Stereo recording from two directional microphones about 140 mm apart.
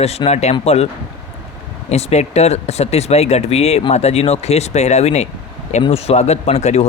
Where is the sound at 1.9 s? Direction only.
50° left (ahead or behind).